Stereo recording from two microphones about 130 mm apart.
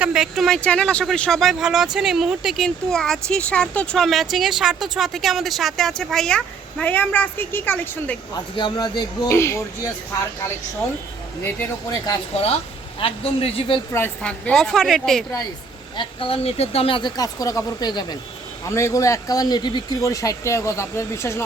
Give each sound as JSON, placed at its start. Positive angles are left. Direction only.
{"t": 0.0, "sound": "speech", "side_deg": -5}
{"t": 8.5, "sound": "music", "side_deg": 35}
{"t": 9.3, "sound": "speech", "side_deg": 20}
{"t": 12.3, "sound": "speech", "side_deg": 50}
{"t": 13.9, "sound": "speech", "side_deg": 10}
{"t": 16.0, "sound": "speech", "side_deg": 45}
{"t": 17.2, "sound": "speech", "side_deg": 30}
{"t": 18.7, "sound": "speech", "side_deg": 20}